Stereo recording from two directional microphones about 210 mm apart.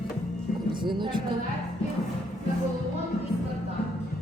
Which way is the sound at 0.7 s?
20° right (ahead or behind).